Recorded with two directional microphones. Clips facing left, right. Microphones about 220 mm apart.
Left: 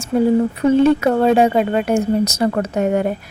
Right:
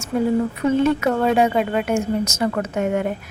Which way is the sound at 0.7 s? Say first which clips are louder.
Left 5 dB; 35° left (ahead or behind).